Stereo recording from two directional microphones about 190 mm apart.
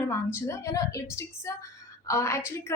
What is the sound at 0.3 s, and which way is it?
A woman's voice, 15° left (ahead or behind).